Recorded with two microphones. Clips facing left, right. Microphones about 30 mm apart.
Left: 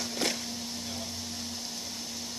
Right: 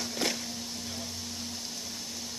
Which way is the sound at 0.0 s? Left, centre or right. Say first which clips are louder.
Even; centre.